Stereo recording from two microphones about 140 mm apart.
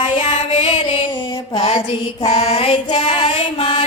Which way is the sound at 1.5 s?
45° left (ahead or behind).